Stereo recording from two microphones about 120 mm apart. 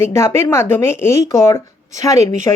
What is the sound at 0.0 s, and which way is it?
Speech, 20° left (ahead or behind).